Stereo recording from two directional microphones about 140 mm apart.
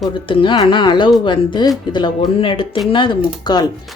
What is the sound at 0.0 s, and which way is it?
A woman's voice, 35° left (ahead or behind).